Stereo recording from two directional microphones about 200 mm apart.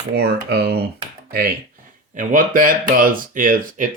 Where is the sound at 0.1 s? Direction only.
55° right (ahead or behind).